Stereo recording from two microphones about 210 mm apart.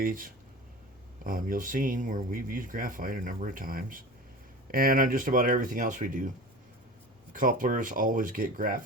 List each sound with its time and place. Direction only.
0.0 s speech: 40° right (ahead or behind)
7.3 s speech: 40° right (ahead or behind)